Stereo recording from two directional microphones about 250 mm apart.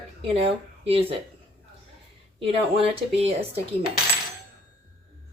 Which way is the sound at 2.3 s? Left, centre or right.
Right.